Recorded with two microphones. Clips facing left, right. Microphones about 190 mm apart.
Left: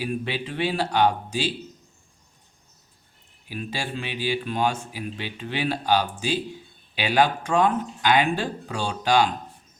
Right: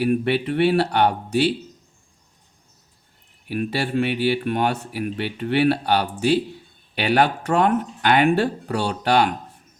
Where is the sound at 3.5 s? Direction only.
60° right (ahead or behind).